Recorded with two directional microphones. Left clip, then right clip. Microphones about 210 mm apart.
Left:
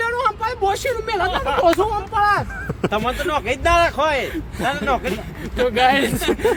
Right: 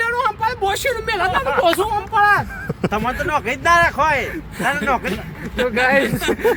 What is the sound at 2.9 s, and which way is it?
Speech, 25° left (ahead or behind).